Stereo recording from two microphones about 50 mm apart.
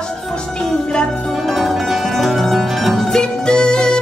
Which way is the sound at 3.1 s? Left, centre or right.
Centre.